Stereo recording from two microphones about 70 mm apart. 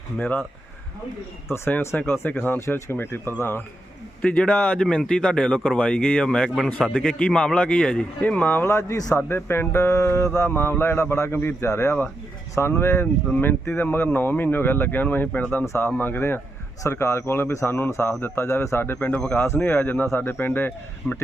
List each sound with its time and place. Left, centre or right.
1.5 s speech: left
2.2 s speech: left
2.6 s a man's voice: left
3.0 s speech: left
4.2 s speech: centre; by 8.7 s left
8.7 s a man's voice: left
9.3 s speech: left
16.8 s speech: left
18.9 s speech: centre
19.4 s speech: left